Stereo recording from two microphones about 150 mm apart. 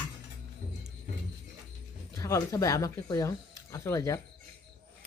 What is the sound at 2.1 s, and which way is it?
Speech, 20° left (ahead or behind).